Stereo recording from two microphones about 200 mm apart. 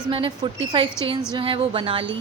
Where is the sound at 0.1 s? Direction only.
25° right (ahead or behind).